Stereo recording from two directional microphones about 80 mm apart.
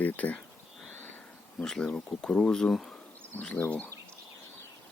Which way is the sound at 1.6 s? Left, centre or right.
Centre.